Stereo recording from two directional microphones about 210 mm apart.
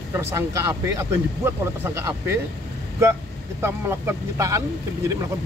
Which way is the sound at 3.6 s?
10° right (ahead or behind).